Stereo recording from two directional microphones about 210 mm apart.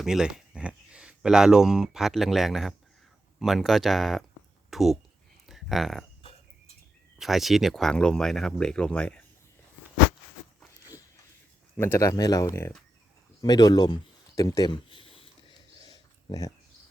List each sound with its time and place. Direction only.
0.0 s speech: centre (ahead or behind)
5.5 s a sound: centre (ahead or behind)
7.2 s speech: centre (ahead or behind)
10.6 s dog: 10° right (ahead or behind)
11.8 s speech: 15° left (ahead or behind)
13.4 s a sound: 20° left (ahead or behind)